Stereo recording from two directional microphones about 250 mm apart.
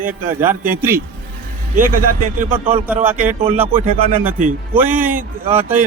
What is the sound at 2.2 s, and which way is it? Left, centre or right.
Speech, right.